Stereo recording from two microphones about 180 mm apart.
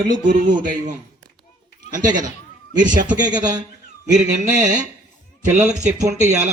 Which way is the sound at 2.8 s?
45° right (ahead or behind).